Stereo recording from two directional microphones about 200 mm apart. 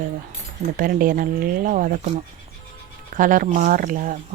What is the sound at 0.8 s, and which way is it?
Speech, 45° right (ahead or behind).